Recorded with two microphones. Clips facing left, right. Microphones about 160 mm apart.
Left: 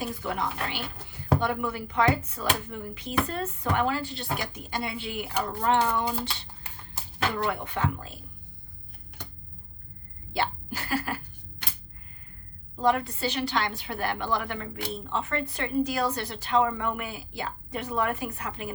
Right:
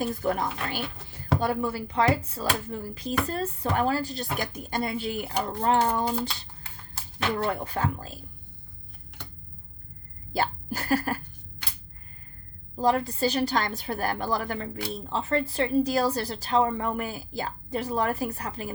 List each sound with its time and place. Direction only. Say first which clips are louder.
0.1 s a woman's voice: right 4 dB; 45° right (ahead or behind)
5.4 s speech: right 1 dB; 25° right (ahead or behind)
5.7 s a woman's voice: right 1 dB; 35° right (ahead or behind)
7.5 s a woman's voice: right 1 dB; 35° right (ahead or behind)
10.3 s speech: right 2 dB; 40° right (ahead or behind)
12.8 s a woman's voice: right 2 dB; 35° right (ahead or behind)